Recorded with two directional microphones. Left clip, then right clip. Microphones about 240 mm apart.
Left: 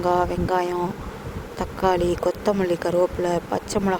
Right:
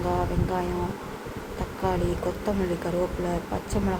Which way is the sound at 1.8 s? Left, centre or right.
Left.